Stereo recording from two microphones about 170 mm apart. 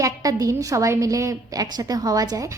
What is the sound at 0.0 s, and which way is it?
A woman's voice, 20° right (ahead or behind).